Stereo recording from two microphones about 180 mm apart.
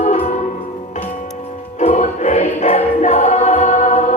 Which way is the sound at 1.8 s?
40° left (ahead or behind).